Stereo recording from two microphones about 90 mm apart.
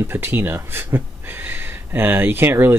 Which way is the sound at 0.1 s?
25° right (ahead or behind).